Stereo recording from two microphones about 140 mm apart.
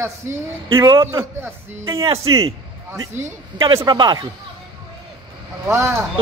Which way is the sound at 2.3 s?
35° right (ahead or behind).